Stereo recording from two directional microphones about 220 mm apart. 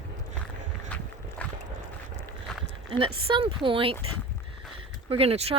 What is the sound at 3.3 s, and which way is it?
Speech, 25° right (ahead or behind).